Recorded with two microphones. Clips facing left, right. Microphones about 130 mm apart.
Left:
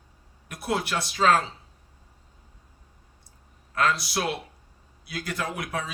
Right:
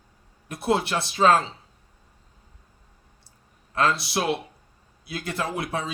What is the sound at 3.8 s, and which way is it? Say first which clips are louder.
A man's voice: right 2 dB; 25° right (ahead or behind).